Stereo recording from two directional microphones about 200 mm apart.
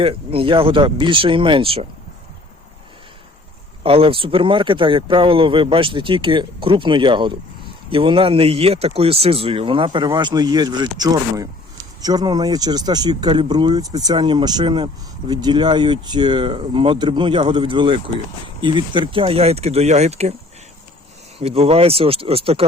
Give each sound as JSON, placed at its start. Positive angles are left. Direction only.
{"t": 0.0, "sound": "speech", "side_deg": -30}
{"t": 3.8, "sound": "speech", "side_deg": -25}
{"t": 21.3, "sound": "speech", "side_deg": -30}